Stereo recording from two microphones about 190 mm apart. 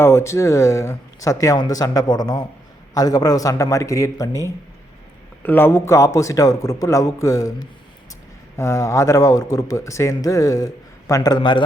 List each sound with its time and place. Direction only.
0.0 s speech: 15° left (ahead or behind)
8.5 s speech: 15° left (ahead or behind)